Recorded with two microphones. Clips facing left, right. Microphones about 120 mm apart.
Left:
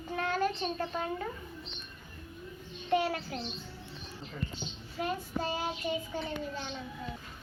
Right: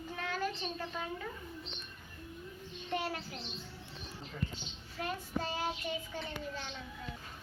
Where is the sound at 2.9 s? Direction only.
80° left.